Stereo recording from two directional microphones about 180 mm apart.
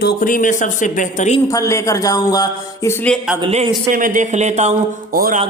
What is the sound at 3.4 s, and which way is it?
Speech, 30° right (ahead or behind).